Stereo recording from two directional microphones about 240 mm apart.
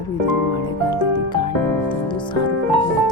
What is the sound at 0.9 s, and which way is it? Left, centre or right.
Music, centre.